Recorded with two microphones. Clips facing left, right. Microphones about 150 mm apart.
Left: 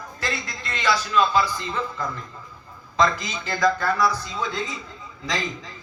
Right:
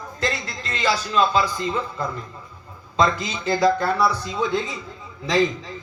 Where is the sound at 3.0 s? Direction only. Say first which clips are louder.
Right 1 dB; 30° right (ahead or behind).